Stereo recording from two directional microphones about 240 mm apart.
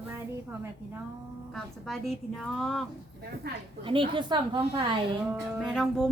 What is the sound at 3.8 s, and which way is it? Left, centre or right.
A woman's voice, right.